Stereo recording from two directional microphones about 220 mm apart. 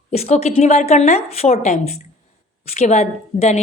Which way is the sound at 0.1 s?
30° left (ahead or behind).